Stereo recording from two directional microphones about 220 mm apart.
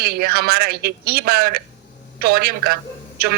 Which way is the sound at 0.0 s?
45° right (ahead or behind).